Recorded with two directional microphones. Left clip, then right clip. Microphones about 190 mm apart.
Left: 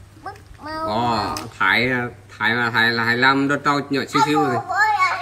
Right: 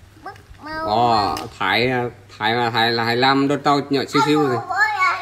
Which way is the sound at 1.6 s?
10° right (ahead or behind).